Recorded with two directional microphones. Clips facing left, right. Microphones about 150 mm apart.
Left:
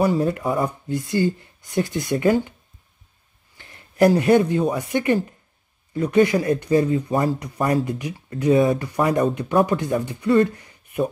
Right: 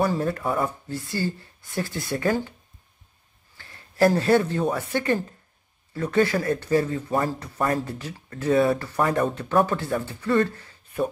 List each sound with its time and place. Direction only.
0.2 s speech: 20° left (ahead or behind)
3.5 s speech: 20° left (ahead or behind)